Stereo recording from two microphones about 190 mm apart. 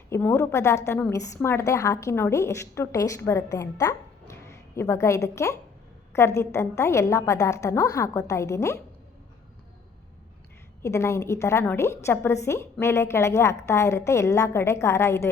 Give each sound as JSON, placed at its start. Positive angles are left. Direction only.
{"t": 0.1, "sound": "a woman's voice", "side_deg": 10}
{"t": 10.8, "sound": "a woman's voice", "side_deg": 15}